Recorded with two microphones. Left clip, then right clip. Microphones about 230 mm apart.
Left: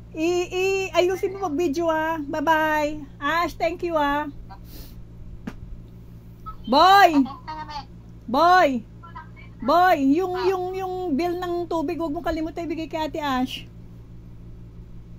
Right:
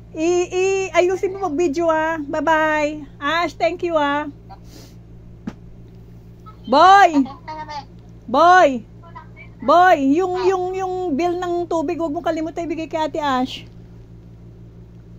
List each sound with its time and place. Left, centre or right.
0.1 s a woman's voice: left
6.6 s music: left
8.3 s a woman's voice: left